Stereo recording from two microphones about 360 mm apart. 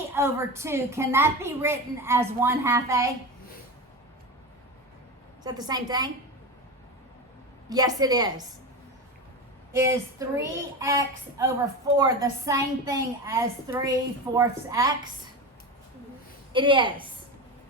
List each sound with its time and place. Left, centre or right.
0.1 s a woman's voice: centre
5.4 s a woman's voice: centre
7.7 s a woman's voice: centre
9.7 s a woman's voice: centre
16.5 s a woman's voice: centre